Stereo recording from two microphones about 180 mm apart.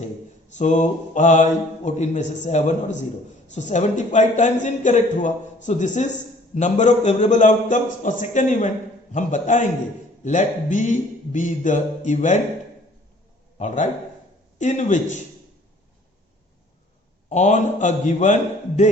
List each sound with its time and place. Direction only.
0.5 s a man's voice: 40° left (ahead or behind)
13.6 s a man's voice: 40° left (ahead or behind)
17.2 s a man's voice: 40° left (ahead or behind)